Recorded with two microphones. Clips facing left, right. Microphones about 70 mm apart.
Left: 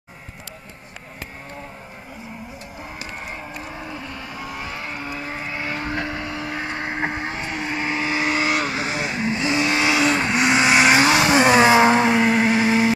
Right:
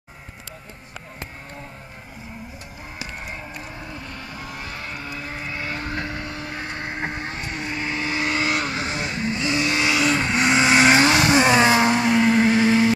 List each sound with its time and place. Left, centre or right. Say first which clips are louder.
3.6 s vehicle: left 3 dB; left
11.8 s vehicle: left 2 dB; left